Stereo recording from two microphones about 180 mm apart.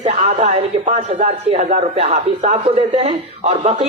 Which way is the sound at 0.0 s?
35° right (ahead or behind).